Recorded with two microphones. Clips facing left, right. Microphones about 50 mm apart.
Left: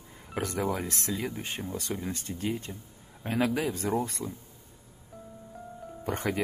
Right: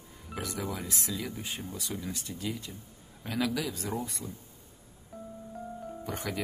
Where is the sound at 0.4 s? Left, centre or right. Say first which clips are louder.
Left 6 dB; left.